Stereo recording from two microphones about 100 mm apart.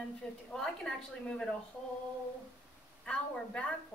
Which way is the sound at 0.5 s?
10° left (ahead or behind).